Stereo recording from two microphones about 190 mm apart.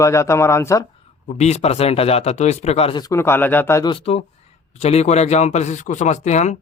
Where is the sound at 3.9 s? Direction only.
30° left (ahead or behind).